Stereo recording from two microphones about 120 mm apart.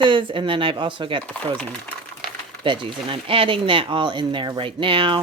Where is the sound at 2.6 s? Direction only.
45° right (ahead or behind).